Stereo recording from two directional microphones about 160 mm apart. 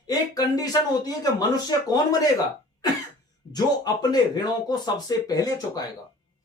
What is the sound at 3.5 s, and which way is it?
Speech, 25° left (ahead or behind).